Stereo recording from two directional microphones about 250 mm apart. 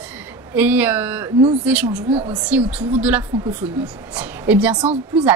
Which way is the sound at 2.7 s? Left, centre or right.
Centre.